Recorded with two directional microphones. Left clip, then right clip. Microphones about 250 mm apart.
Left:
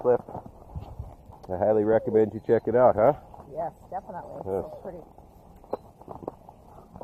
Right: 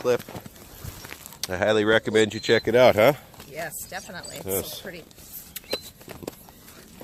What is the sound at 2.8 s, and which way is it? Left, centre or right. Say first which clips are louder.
Speech: right 3 dB; right.